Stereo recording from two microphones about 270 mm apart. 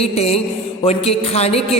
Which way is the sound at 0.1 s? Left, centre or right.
Left.